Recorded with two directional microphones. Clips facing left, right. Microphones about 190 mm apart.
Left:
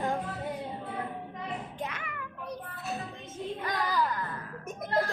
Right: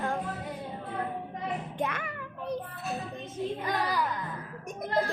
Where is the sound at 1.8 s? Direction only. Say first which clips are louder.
Right 5 dB; 60° right (ahead or behind).